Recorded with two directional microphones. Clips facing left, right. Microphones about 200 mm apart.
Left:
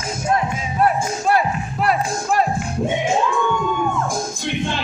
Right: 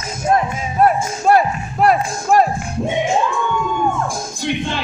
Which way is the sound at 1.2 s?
45° right (ahead or behind).